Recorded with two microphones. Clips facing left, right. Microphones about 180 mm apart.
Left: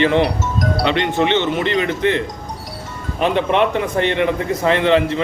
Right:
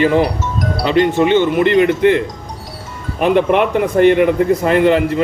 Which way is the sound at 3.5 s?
10° right (ahead or behind).